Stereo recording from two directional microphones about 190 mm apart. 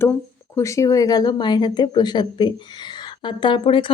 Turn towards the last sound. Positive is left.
turn(degrees=25)  # may be behind; listen again after turning